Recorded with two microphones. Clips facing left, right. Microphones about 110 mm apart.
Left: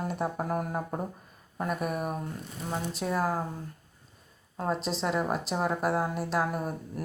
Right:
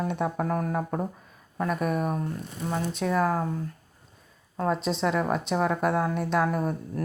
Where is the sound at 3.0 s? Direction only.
65° right (ahead or behind).